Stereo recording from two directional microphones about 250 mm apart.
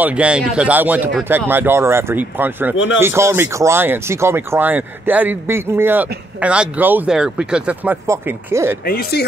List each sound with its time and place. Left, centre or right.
0.0 s speech: centre
8.8 s speech: left